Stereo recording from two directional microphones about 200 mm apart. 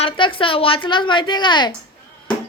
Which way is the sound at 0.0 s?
25° left (ahead or behind).